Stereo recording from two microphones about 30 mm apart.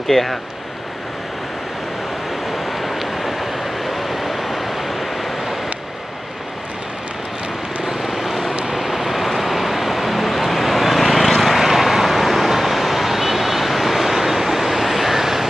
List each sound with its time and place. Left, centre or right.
0.1 s speech: centre
2.5 s vehicle: centre
7.8 s vehicle: centre